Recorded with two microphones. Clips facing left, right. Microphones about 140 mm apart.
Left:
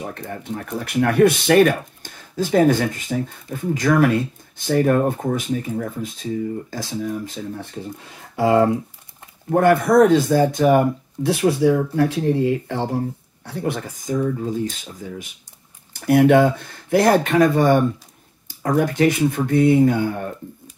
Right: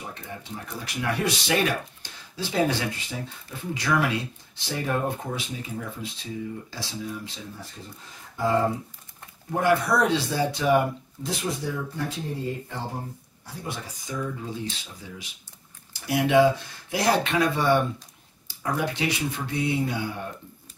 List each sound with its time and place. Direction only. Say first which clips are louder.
0.0 s speech: left 8 dB; 55° left (ahead or behind)
8.4 s speech: left 8 dB; 75° left (ahead or behind)
9.5 s speech: left 7 dB; 55° left (ahead or behind)
11.2 s speech: left 13 dB; 70° left (ahead or behind)
13.5 s speech: left 10 dB; 65° left (ahead or behind); by 20.2 s 50° left (ahead or behind)